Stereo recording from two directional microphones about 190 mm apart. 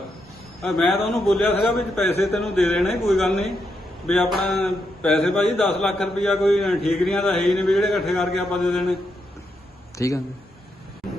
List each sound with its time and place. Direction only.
0.6 s a man's voice: centre (ahead or behind)
10.0 s speech: 15° left (ahead or behind)